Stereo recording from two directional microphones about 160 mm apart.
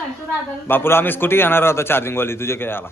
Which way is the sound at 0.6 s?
15° left (ahead or behind).